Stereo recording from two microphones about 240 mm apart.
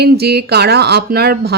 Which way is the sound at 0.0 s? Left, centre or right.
Right.